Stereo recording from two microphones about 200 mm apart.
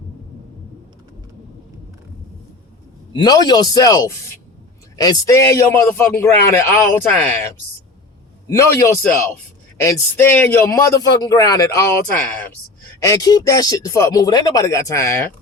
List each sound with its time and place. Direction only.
3.1 s speech: 20° left (ahead or behind)
13.1 s speech: 20° left (ahead or behind)